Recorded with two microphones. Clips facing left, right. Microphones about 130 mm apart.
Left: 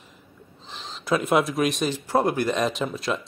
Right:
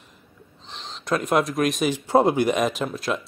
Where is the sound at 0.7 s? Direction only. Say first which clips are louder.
Left 1 dB; centre (ahead or behind).